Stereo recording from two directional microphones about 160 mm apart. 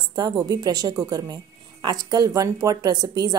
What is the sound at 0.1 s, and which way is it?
Speech, 25° right (ahead or behind).